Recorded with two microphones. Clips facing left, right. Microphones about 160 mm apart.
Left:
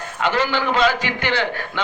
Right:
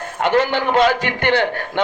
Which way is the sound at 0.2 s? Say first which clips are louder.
Right 4 dB; 55° right (ahead or behind).